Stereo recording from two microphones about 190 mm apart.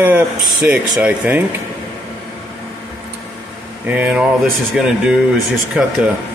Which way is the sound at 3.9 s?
10° right (ahead or behind).